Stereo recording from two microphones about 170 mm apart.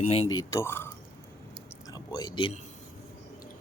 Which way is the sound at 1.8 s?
25° left (ahead or behind).